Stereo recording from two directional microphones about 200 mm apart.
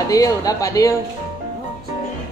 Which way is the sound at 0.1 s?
15° left (ahead or behind).